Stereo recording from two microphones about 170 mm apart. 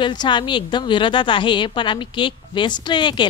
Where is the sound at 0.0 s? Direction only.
25° left (ahead or behind).